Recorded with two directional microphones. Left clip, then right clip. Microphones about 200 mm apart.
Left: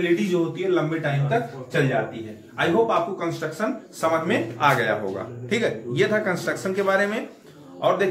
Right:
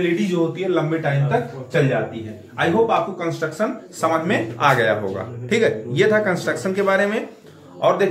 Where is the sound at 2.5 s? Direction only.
10° right (ahead or behind).